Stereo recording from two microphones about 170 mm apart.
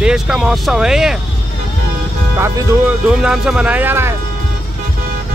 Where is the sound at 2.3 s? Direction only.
15° right (ahead or behind).